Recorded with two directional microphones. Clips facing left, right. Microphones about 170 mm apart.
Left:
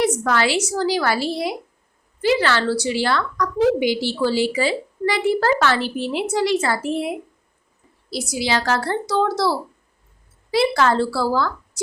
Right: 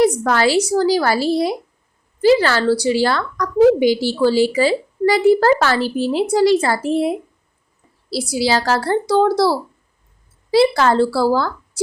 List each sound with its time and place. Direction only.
0.0 s a woman's voice: 40° right (ahead or behind)
8.1 s a woman's voice: 30° right (ahead or behind)